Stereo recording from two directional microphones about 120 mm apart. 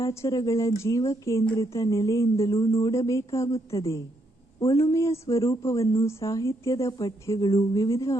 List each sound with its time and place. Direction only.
0.0 s speech: 25° left (ahead or behind)